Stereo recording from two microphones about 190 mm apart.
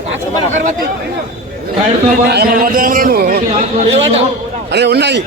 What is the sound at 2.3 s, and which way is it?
A man's voice, 55° right (ahead or behind).